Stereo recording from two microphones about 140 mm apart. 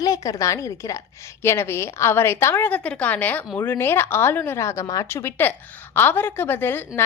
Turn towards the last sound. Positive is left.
turn(degrees=15)  # may be behind; listen again after turning